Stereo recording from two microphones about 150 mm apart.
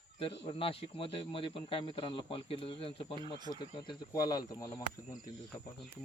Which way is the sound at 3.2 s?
30° right (ahead or behind).